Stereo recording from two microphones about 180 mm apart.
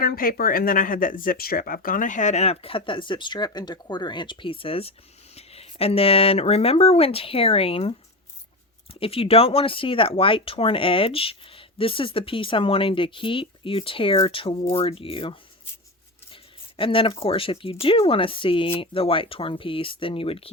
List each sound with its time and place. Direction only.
0.0 s speech: 55° left (ahead or behind); by 20.5 s 30° left (ahead or behind)